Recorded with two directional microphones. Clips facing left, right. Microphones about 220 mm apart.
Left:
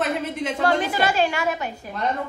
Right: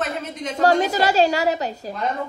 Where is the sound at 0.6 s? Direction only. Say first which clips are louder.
Right 5 dB; 40° right (ahead or behind).